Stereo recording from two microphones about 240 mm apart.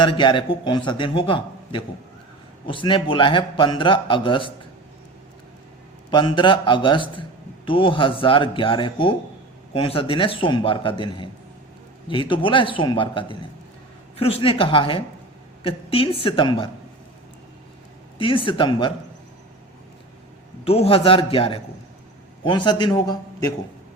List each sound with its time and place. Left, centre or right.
0.0 s a man's voice: centre
6.1 s a man's voice: centre
18.2 s a man's voice: left
20.7 s a man's voice: left